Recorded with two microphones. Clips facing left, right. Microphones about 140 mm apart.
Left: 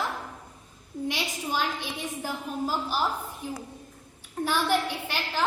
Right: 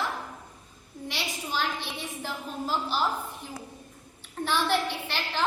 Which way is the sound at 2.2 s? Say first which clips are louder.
Left 3 dB; 10° left (ahead or behind).